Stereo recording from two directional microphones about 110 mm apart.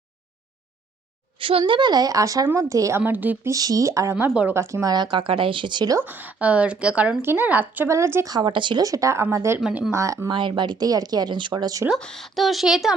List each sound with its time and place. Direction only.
1.4 s speech: 55° right (ahead or behind); by 3.0 s 30° right (ahead or behind)
3.0 s speech: 15° right (ahead or behind)
3.5 s speech: 30° right (ahead or behind)
5.1 s speech: 50° right (ahead or behind)
6.0 s speech: 15° right (ahead or behind)
7.9 s speech: 25° right (ahead or behind)
8.3 s speech: 40° right (ahead or behind)
8.8 s speech: 30° right (ahead or behind)
9.6 s speech: 5° right (ahead or behind)
9.9 s speech: 25° right (ahead or behind)
10.2 s speech: 45° right (ahead or behind)
11.9 s speech: 5° left (ahead or behind)